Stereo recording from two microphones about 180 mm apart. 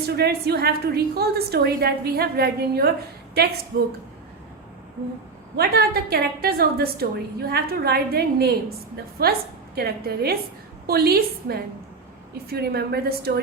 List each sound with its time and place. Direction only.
0.0 s a woman's voice: 60° right (ahead or behind)
5.5 s a woman's voice: 60° right (ahead or behind)